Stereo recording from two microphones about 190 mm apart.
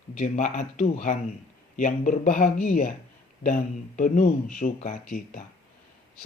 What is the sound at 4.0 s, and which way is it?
Speech, 45° left (ahead or behind).